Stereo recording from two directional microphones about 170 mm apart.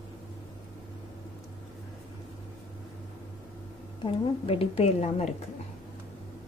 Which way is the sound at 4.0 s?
35° left (ahead or behind).